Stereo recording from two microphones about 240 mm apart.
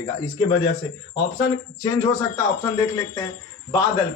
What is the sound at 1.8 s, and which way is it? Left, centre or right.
A man's voice, centre.